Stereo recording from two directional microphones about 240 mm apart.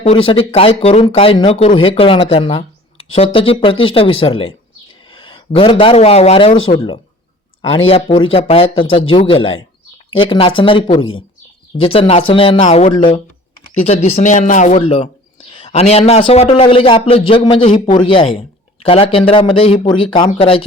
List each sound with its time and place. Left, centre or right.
0.3 s a man's voice: left
2.3 s a sound: left
3.2 s a man's voice: left